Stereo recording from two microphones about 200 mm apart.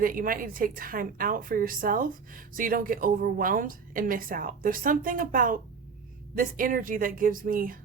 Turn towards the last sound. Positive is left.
turn(degrees=-45)  # may be behind; listen again after turning